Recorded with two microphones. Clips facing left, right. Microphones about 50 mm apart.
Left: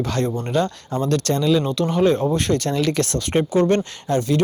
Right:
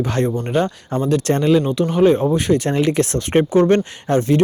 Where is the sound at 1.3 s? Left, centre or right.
Right; by 2.7 s centre.